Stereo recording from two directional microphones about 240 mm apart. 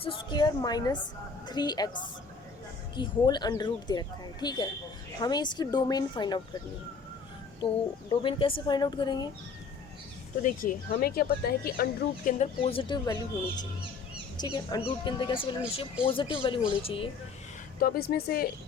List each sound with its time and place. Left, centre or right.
0.0 s speech: left
8.1 s speech: left
10.4 s speech: left
14.5 s speech: centre
17.7 s speech: left